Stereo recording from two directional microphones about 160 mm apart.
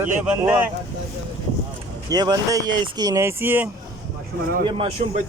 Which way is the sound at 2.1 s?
25° right (ahead or behind).